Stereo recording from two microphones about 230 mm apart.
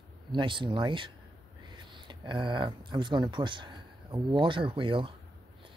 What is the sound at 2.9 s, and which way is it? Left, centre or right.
Speech, centre.